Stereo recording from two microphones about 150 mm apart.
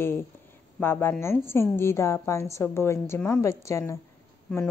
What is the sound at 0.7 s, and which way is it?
A woman's voice, 15° left (ahead or behind).